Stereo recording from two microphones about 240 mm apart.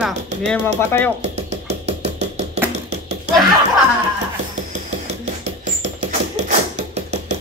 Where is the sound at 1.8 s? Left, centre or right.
Right.